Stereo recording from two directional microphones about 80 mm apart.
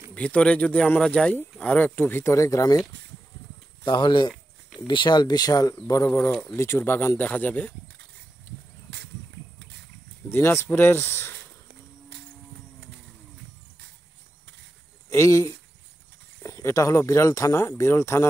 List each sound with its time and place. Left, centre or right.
0.1 s speech: centre
2.3 s speech: left
3.8 s speech: left
4.3 s a sound: centre
4.8 s speech: left
6.0 s speech: left
10.3 s speech: left
15.0 s speech: left